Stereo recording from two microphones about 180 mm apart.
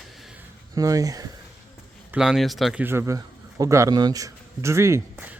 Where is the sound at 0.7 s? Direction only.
20° right (ahead or behind).